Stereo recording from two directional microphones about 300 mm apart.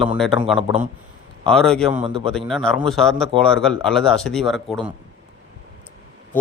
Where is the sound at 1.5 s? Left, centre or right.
Centre.